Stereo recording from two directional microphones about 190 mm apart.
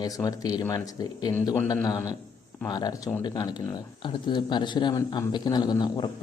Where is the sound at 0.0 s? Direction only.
20° left (ahead or behind).